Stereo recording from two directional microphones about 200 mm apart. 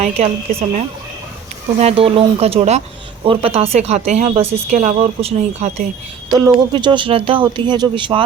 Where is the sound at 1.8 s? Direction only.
30° right (ahead or behind).